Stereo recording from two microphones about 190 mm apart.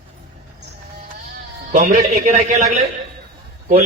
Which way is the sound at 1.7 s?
40° right (ahead or behind).